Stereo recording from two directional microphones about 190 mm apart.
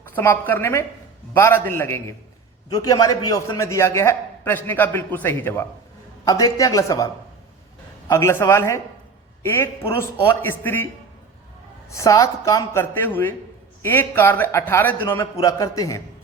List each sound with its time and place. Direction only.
0.2 s a man's voice: 10° left (ahead or behind)
11.9 s a man's voice: 15° left (ahead or behind)